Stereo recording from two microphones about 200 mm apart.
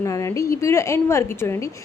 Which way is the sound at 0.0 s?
15° left (ahead or behind).